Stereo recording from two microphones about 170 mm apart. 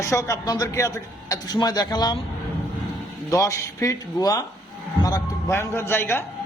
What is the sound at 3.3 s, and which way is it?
A man's voice, 20° left (ahead or behind).